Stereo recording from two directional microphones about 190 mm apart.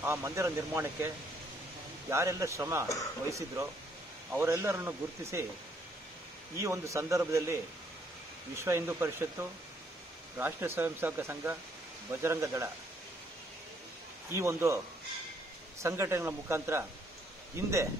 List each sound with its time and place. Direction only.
0.0 s speech: 15° right (ahead or behind)
6.6 s speech: 15° right (ahead or behind)
8.5 s speech: 15° right (ahead or behind)
14.3 s speech: 15° right (ahead or behind)
15.8 s speech: 15° right (ahead or behind)